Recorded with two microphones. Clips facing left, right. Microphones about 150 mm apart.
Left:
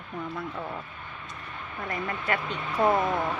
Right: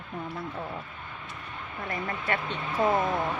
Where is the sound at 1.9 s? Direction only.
30° right (ahead or behind).